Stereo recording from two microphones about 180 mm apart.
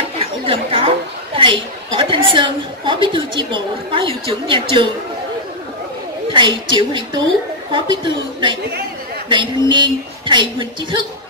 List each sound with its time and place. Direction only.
0.2 s a woman's voice: 30° right (ahead or behind)
6.2 s a woman's voice: 25° right (ahead or behind)